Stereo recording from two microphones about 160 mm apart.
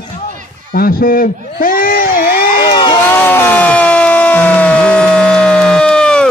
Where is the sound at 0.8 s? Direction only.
65° left (ahead or behind).